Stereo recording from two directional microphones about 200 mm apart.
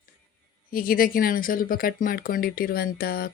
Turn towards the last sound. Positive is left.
turn(degrees=50)  # may be behind; listen again after turning